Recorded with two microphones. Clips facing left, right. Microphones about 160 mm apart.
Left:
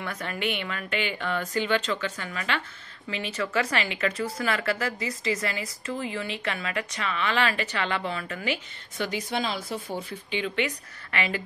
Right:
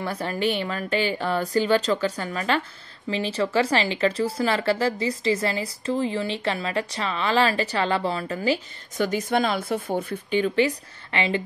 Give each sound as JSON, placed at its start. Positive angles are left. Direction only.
{"t": 0.0, "sound": "speech", "side_deg": -35}